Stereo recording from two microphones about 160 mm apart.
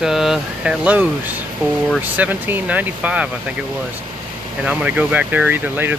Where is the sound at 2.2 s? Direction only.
10° right (ahead or behind).